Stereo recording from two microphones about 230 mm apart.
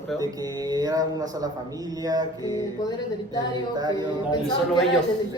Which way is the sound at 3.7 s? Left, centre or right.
Centre.